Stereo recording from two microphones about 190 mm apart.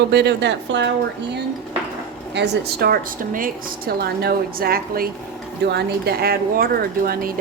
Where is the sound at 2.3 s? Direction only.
65° right (ahead or behind).